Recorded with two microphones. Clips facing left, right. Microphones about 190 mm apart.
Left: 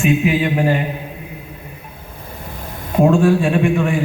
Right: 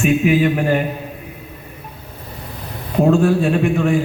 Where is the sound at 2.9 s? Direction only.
50° left (ahead or behind).